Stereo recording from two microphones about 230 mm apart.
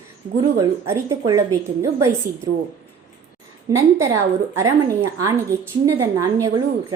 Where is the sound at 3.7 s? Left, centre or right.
Centre.